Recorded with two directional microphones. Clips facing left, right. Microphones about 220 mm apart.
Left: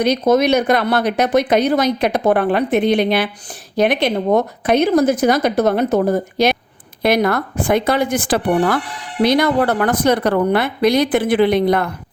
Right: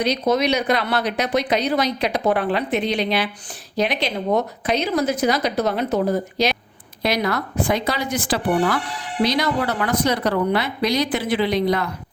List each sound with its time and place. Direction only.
0.0 s speech: 50° left (ahead or behind)